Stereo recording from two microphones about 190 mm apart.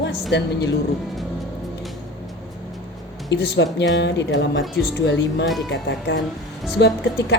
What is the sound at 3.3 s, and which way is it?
A woman's voice, 60° left (ahead or behind).